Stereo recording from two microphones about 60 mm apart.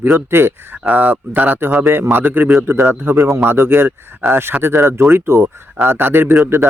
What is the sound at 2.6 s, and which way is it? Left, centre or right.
A man's voice, right.